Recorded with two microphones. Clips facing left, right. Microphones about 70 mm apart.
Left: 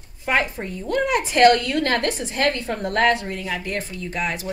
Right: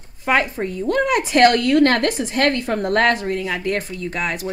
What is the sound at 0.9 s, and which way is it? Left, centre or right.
A woman's voice, right.